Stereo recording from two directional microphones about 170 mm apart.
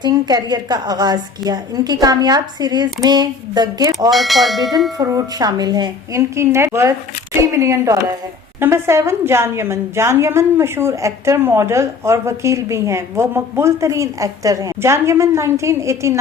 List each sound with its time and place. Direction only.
0.0 s a woman's voice: 25° right (ahead or behind)
4.1 s speech: centre (ahead or behind)
4.9 s a woman's voice: 20° right (ahead or behind)